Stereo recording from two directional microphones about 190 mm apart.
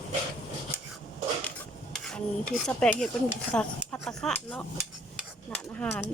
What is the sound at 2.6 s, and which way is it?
A woman's voice, 5° left (ahead or behind).